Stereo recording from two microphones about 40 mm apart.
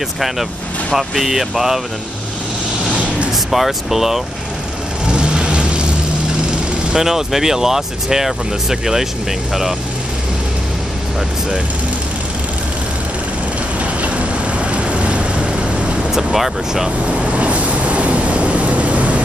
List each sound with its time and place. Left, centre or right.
0.9 s speech: centre
3.4 s speech: centre
5.0 s vehicle: right
6.9 s speech: centre
14.0 s vehicle: right
16.1 s speech: centre
17.0 s vehicle: right